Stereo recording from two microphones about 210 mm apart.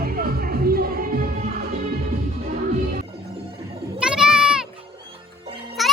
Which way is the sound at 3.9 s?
5° right (ahead or behind).